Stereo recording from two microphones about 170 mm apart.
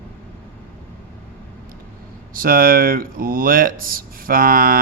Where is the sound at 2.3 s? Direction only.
55° right (ahead or behind).